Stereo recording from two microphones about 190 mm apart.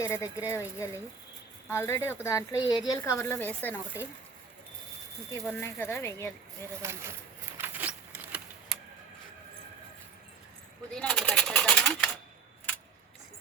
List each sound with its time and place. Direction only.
0.0 s speech: 15° left (ahead or behind)
5.5 s speech: 10° left (ahead or behind)
7.6 s a sound: 10° right (ahead or behind)
10.9 s typewriter: 5° left (ahead or behind)